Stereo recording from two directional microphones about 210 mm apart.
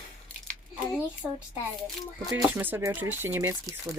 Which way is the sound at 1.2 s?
5° right (ahead or behind).